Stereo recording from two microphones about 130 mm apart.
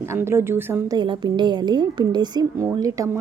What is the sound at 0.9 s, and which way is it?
A woman's voice, 35° right (ahead or behind).